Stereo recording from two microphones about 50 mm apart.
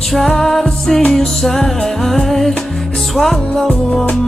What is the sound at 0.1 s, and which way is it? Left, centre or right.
Music, centre.